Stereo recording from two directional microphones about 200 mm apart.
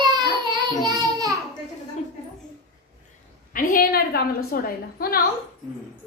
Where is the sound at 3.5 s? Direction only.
45° left (ahead or behind).